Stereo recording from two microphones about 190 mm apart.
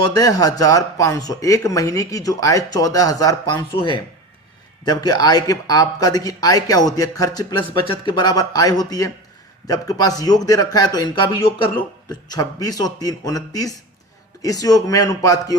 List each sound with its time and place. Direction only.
0.0 s speech: 20° left (ahead or behind)